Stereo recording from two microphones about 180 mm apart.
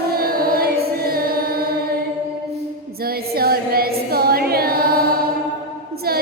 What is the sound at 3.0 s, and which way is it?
Music, 60° right (ahead or behind).